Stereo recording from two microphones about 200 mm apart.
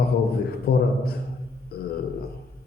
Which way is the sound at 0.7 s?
50° left (ahead or behind).